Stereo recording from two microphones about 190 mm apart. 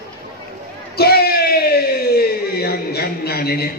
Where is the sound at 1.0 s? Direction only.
55° left (ahead or behind).